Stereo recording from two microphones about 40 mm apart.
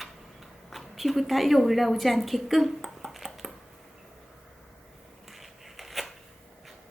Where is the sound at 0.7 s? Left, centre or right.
Centre.